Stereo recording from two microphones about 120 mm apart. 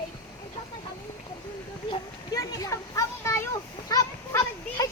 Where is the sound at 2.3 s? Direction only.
30° left (ahead or behind).